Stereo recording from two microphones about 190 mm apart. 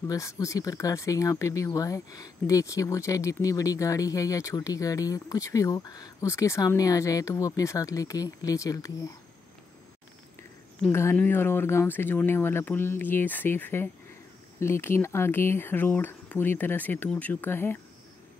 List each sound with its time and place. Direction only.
0.1 s speech: 15° left (ahead or behind)
10.9 s speech: 15° left (ahead or behind)